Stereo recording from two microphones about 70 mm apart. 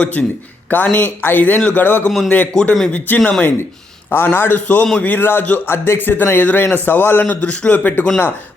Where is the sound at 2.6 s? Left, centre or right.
Centre.